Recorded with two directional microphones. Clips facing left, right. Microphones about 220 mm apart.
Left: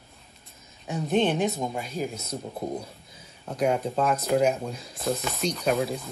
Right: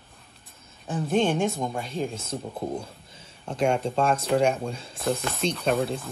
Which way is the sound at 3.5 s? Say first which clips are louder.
Right 1 dB; 30° right (ahead or behind).